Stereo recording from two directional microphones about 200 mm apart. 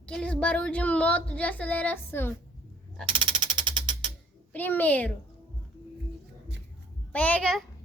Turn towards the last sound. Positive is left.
turn(degrees=5)  # may be behind; listen again after turning